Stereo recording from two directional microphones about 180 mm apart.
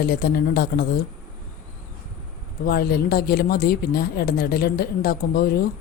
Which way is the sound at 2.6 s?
55° left (ahead or behind).